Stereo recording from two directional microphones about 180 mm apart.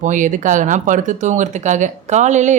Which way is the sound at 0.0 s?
45° right (ahead or behind).